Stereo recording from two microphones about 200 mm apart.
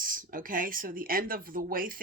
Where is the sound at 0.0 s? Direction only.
45° right (ahead or behind).